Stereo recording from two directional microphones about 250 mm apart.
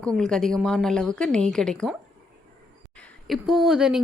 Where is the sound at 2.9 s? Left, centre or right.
Centre.